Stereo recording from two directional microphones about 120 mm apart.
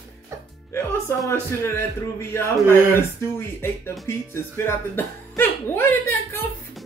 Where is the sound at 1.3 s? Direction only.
20° left (ahead or behind).